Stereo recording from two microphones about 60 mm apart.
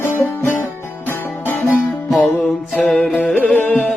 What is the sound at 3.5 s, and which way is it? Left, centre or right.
Music, left.